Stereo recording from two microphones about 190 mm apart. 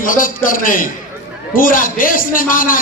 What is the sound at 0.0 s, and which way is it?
A man's voice, 45° left (ahead or behind).